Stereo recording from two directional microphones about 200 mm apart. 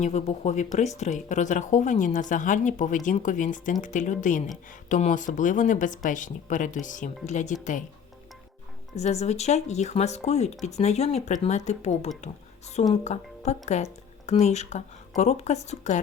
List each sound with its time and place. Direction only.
0.0 s speech: 35° left (ahead or behind)
9.0 s speech: 35° left (ahead or behind)